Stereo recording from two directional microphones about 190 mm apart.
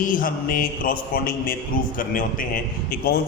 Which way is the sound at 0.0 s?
45° left (ahead or behind).